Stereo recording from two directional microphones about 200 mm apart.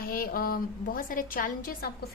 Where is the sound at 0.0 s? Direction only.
50° left (ahead or behind).